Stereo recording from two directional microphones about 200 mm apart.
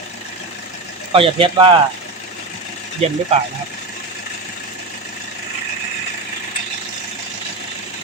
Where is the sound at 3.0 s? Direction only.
30° right (ahead or behind).